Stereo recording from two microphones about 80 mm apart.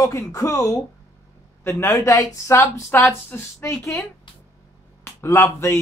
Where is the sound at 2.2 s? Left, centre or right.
Left.